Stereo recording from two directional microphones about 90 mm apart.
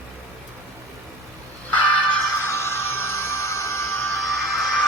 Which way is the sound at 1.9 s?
15° left (ahead or behind).